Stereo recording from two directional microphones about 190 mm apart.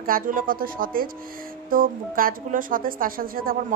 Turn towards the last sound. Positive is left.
turn(degrees=-50)  # may be behind; listen again after turning